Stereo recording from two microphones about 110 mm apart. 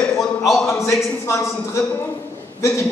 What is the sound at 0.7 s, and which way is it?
A man's voice, 30° left (ahead or behind).